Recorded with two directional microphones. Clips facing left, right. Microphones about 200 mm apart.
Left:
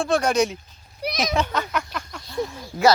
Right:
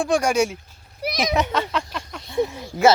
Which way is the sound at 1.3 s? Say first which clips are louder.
Right 3 dB; 20° right (ahead or behind).